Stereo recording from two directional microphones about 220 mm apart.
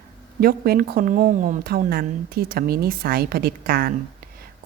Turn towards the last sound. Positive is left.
turn(degrees=-40)  # may be behind; listen again after turning